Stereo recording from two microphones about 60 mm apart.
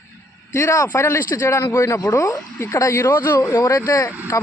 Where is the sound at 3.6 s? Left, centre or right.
Left.